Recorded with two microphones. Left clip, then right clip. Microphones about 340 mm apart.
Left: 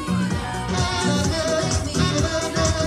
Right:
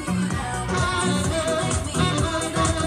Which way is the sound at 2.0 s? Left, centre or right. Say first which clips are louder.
Left 1 dB; centre.